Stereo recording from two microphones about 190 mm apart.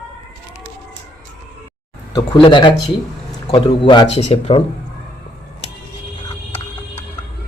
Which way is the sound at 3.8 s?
25° left (ahead or behind).